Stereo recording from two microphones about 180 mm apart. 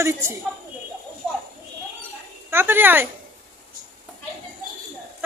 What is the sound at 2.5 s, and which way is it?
Speech, 10° right (ahead or behind).